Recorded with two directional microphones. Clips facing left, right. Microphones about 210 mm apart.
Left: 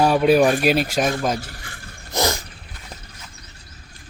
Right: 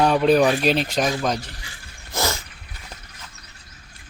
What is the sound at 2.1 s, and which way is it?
Dog, 15° left (ahead or behind).